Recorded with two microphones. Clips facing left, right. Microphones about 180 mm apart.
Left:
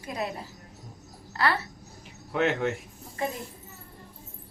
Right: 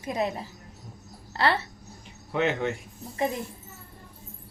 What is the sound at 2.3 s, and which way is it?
Speech, centre (ahead or behind).